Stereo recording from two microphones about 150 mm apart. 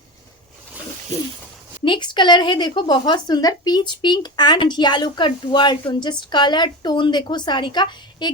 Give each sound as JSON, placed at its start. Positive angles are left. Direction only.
{"t": 1.8, "sound": "speech", "side_deg": 30}